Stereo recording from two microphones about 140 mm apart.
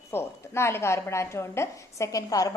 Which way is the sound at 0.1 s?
20° left (ahead or behind).